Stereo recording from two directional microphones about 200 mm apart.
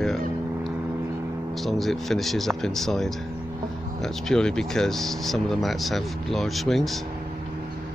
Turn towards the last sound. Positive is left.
turn(degrees=0)  # may be behind; listen again after turning